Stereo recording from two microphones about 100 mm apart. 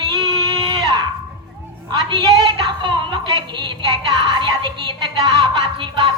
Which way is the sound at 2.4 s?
55° right (ahead or behind).